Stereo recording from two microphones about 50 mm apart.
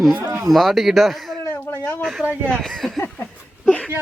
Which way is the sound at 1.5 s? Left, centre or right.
Left.